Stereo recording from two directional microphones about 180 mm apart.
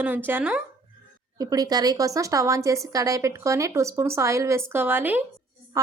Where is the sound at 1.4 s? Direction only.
20° right (ahead or behind).